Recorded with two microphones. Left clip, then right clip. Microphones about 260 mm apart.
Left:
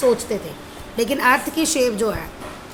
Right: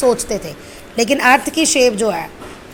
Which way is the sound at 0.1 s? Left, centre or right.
Centre.